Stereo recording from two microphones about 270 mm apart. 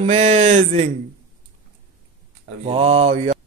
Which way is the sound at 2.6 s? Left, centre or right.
Right.